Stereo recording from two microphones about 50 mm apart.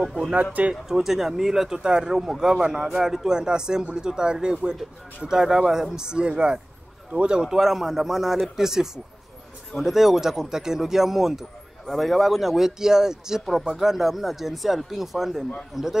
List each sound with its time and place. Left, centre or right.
0.3 s speech: right
0.8 s speech: centre